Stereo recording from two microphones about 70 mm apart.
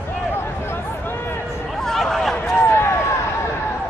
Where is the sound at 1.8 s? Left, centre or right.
Centre.